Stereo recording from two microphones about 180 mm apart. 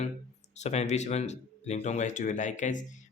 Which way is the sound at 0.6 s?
40° left (ahead or behind).